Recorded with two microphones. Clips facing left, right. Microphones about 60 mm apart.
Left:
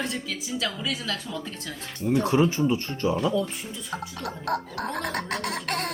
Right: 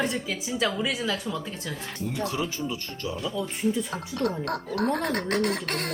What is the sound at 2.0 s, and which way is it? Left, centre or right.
Speech, left.